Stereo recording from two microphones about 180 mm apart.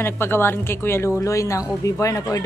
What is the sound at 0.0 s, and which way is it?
A woman's voice, 15° left (ahead or behind).